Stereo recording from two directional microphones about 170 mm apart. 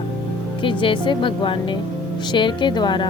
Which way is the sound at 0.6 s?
30° left (ahead or behind).